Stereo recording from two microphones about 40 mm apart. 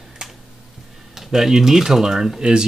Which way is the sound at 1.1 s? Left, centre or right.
Centre.